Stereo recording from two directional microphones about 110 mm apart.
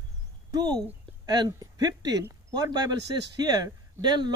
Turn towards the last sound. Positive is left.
turn(degrees=-40)  # may be behind; listen again after turning